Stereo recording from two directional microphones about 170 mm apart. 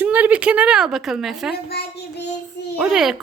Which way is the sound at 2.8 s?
Centre (ahead or behind).